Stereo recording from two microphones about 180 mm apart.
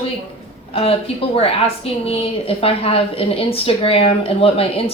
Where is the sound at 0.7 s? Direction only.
30° left (ahead or behind).